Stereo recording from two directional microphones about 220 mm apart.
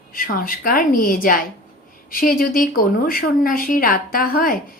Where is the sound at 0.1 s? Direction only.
40° left (ahead or behind).